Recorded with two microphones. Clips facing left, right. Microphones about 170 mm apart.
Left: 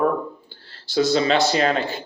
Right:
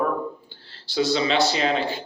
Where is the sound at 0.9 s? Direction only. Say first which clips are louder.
Left 3 dB; 45° left (ahead or behind).